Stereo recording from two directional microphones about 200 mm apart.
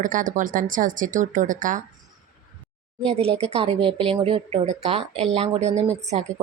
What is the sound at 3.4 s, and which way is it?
Speech, 30° right (ahead or behind).